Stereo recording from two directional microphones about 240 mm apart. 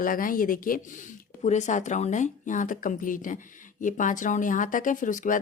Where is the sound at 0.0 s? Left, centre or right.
Left.